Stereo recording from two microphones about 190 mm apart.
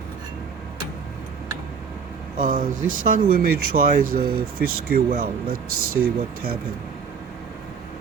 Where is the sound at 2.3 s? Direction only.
45° right (ahead or behind).